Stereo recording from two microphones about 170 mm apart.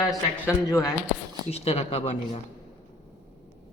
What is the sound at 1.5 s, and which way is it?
Speech, 35° left (ahead or behind).